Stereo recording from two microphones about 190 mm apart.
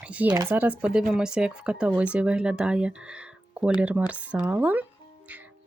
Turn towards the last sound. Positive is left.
turn(degrees=-10)  # may be behind; listen again after turning